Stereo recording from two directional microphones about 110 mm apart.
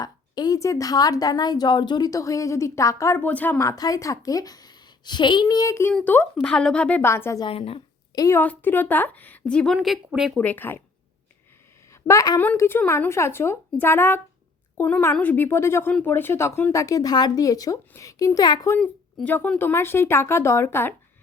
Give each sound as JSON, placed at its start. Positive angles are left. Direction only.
{"t": 0.0, "sound": "a woman's voice", "side_deg": 35}
{"t": 3.2, "sound": "a woman's voice", "side_deg": 15}
{"t": 3.6, "sound": "a woman's voice", "side_deg": 30}
{"t": 6.1, "sound": "a woman's voice", "side_deg": 15}
{"t": 7.0, "sound": "speech", "side_deg": 25}
{"t": 7.4, "sound": "speech", "side_deg": 55}
{"t": 8.1, "sound": "a woman's voice", "side_deg": 30}
{"t": 8.4, "sound": "a woman's voice", "side_deg": 15}
{"t": 9.7, "sound": "speech", "side_deg": -5}
{"t": 10.3, "sound": "a woman's voice", "side_deg": 15}
{"t": 12.0, "sound": "a woman's voice", "side_deg": 30}
{"t": 12.4, "sound": "a woman's voice", "side_deg": 20}
{"t": 18.8, "sound": "speech", "side_deg": 10}